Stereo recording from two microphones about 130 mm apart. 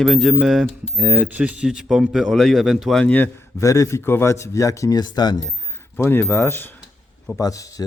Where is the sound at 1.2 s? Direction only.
10° right (ahead or behind); by 5.5 s 30° left (ahead or behind).